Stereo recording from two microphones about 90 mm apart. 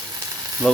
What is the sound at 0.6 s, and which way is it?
Sizzle, 5° left (ahead or behind).